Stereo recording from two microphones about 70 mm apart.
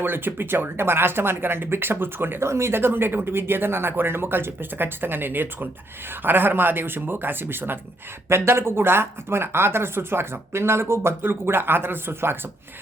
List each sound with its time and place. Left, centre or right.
0.0 s speech: right